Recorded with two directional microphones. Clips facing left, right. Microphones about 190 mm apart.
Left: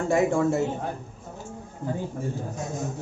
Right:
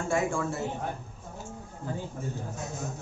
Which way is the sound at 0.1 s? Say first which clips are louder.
Left 6 dB; 40° left (ahead or behind).